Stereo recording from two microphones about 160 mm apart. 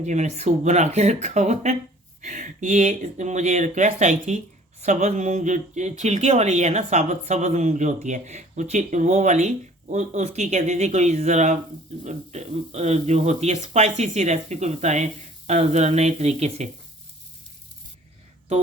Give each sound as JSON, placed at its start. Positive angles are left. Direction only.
{"t": 0.0, "sound": "speech", "side_deg": -45}